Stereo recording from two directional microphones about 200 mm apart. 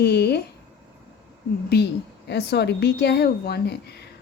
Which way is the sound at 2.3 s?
55° left (ahead or behind).